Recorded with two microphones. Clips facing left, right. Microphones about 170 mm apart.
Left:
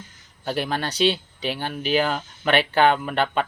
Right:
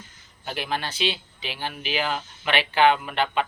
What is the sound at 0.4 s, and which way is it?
Speech, 45° left (ahead or behind).